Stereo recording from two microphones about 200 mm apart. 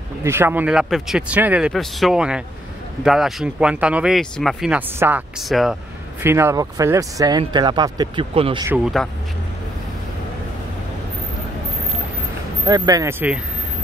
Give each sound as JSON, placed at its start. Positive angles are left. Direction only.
{"t": 0.2, "sound": "speech", "side_deg": -10}
{"t": 6.2, "sound": "speech", "side_deg": -10}
{"t": 8.6, "sound": "speech", "side_deg": -5}
{"t": 12.6, "sound": "speech", "side_deg": -20}